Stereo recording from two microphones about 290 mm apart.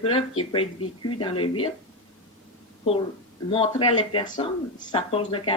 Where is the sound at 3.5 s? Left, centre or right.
Centre.